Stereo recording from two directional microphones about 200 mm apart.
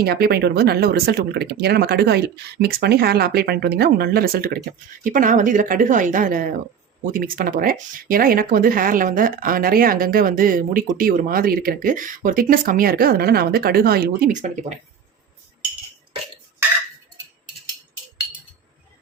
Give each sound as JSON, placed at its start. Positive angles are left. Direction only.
{"t": 0.0, "sound": "a woman's voice", "side_deg": -50}